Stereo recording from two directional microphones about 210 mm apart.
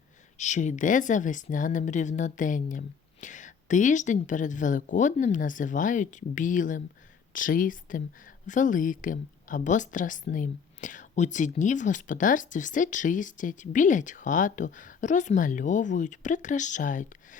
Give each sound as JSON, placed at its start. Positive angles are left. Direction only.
{"t": 0.3, "sound": "speech", "side_deg": 35}